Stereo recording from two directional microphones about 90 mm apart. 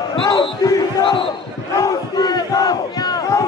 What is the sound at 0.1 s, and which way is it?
Basketball bounce, 60° left (ahead or behind).